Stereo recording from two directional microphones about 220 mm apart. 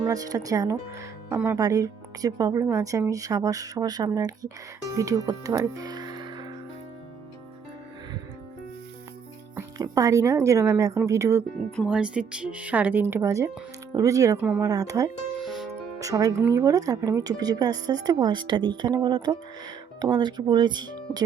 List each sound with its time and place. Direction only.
0.1 s speech: 15° right (ahead or behind)
9.6 s speech: 15° right (ahead or behind)
15.4 s music: centre (ahead or behind)
16.0 s speech: 15° right (ahead or behind)